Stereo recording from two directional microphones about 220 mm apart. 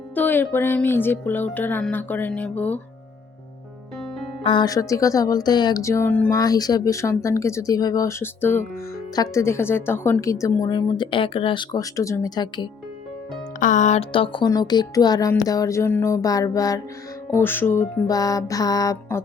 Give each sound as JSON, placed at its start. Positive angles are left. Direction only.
{"t": 0.1, "sound": "speech", "side_deg": 10}
{"t": 4.4, "sound": "speech", "side_deg": 20}
{"t": 13.6, "sound": "speech", "side_deg": 35}